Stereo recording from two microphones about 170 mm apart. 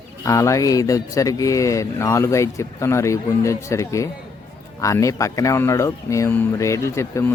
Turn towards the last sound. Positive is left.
turn(degrees=15)  # may be behind; listen again after turning